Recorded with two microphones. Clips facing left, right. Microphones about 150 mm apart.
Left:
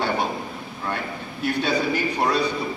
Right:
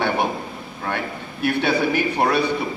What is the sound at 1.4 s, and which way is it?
Speech, 65° right (ahead or behind).